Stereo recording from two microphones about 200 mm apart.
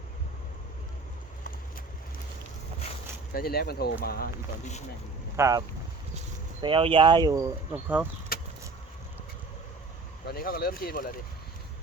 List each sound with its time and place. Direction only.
3.3 s speech: 50° left (ahead or behind)
5.4 s speech: 15° right (ahead or behind)
8.3 s vehicle: 45° left (ahead or behind)
10.2 s speech: 50° left (ahead or behind)